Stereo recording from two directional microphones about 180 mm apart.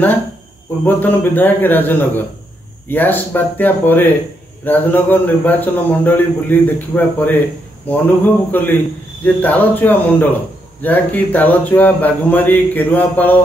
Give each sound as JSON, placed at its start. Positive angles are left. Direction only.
{"t": 0.8, "sound": "a man's voice", "side_deg": 10}